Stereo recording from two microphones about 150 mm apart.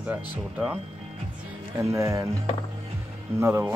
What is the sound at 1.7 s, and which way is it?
Speech, 20° right (ahead or behind).